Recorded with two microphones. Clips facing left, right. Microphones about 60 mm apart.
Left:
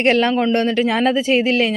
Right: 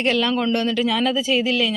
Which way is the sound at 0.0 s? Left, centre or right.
Left.